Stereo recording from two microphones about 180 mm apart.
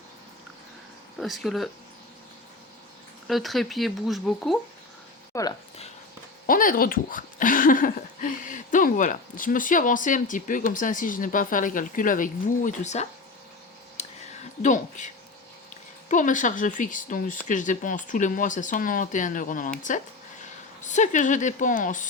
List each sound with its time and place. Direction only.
1.2 s speech: centre (ahead or behind)
3.2 s speech: centre (ahead or behind)
5.3 s speech: 20° left (ahead or behind)
6.5 s speech: 50° left (ahead or behind)
14.0 s a sound: 35° left (ahead or behind)
14.6 s speech: 45° left (ahead or behind)